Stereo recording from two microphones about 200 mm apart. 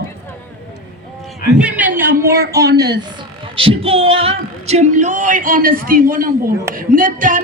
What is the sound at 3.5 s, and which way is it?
Speech, 25° right (ahead or behind).